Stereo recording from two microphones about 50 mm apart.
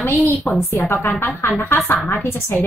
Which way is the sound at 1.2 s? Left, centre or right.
Left.